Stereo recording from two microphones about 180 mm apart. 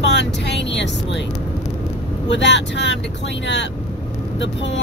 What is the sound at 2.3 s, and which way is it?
Speech, 80° left.